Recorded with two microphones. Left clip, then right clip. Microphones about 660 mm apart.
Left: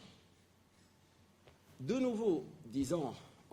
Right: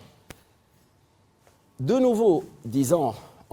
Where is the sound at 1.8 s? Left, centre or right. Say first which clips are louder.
Right 15 dB; right.